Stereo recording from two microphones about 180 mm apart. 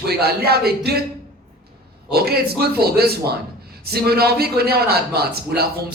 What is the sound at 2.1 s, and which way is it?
A man's voice, 60° right (ahead or behind).